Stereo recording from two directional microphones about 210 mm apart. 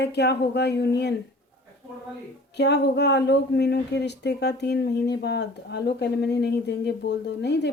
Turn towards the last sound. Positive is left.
turn(degrees=55)  # may be behind; listen again after turning